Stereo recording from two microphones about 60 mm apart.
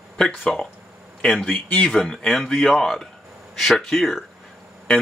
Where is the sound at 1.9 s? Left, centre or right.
Centre.